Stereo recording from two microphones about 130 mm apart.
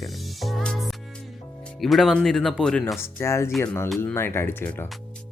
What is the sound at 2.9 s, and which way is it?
Speech, 20° left (ahead or behind).